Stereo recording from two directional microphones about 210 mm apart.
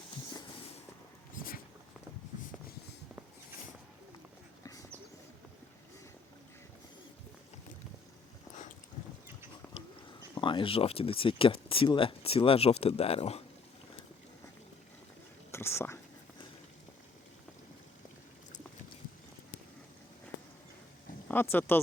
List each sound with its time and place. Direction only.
1.4 s a sound: 45° left (ahead or behind)
4.6 s clip-clop: 15° left (ahead or behind)
10.3 s speech: 20° left (ahead or behind)
15.5 s speech: 10° left (ahead or behind)
21.2 s speech: 10° left (ahead or behind)